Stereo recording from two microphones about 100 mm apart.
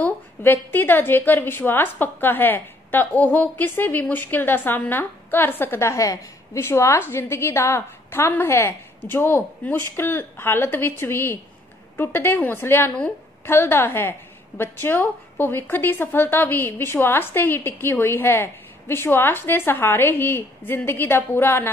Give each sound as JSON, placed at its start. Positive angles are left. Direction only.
{"t": 0.0, "sound": "a woman's voice", "side_deg": 20}